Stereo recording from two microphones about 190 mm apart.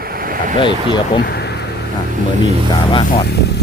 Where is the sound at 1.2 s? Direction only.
60° left (ahead or behind).